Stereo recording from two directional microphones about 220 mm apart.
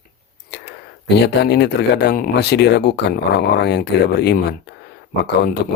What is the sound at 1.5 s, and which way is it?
Speech, 50° left (ahead or behind).